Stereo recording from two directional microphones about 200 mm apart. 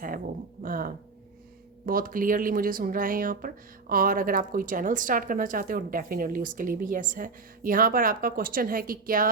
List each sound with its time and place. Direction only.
0.6 s speech: 45° right (ahead or behind)